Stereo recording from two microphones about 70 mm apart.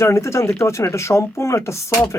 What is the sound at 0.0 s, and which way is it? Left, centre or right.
Speech, left.